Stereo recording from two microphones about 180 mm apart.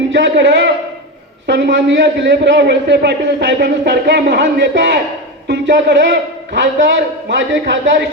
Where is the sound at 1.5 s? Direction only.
75° right (ahead or behind).